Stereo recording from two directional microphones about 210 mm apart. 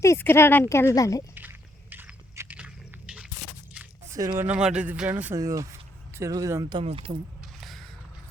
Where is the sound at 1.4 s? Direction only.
10° right (ahead or behind).